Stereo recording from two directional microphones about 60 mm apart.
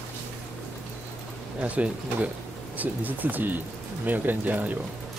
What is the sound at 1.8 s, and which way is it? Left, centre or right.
Speech, right.